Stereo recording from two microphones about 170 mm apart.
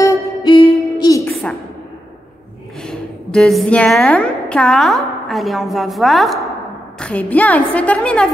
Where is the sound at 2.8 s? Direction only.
5° left (ahead or behind).